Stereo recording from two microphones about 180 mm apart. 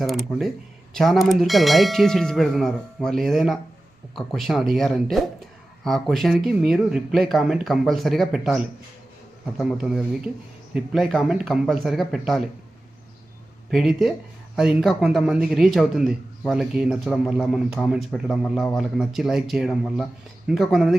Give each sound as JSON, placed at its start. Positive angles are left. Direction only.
{"t": 0.0, "sound": "speech", "side_deg": 0}
{"t": 13.7, "sound": "speech", "side_deg": 0}